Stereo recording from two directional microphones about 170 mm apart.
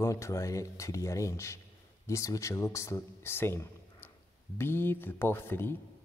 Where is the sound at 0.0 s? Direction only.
20° left (ahead or behind).